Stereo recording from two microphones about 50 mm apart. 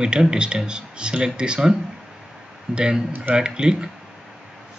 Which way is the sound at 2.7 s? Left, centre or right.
Centre.